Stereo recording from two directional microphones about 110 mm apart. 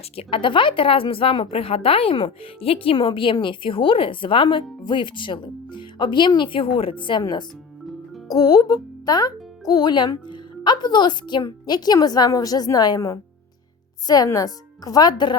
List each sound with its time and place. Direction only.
0.2 s a woman's voice: 50° left (ahead or behind)